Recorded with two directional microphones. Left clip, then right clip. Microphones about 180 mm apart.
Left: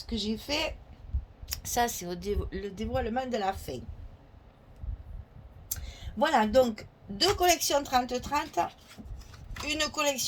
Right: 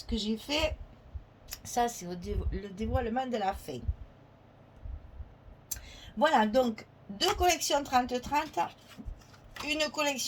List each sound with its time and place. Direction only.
0.0 s a woman's voice: 40° left (ahead or behind)
5.6 s a woman's voice: 45° left (ahead or behind)
9.6 s a woman's voice: 40° left (ahead or behind)